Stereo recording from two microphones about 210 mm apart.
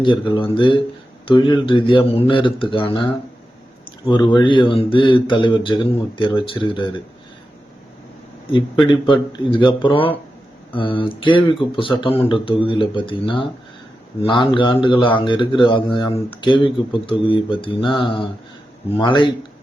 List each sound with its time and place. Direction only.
0.0 s speech: 25° left (ahead or behind)
3.8 s a sound: 20° left (ahead or behind)
4.4 s speech: 25° left (ahead or behind)
8.4 s speech: 25° left (ahead or behind)